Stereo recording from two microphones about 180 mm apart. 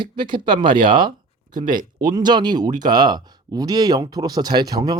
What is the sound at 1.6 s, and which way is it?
Speech, 45° right (ahead or behind).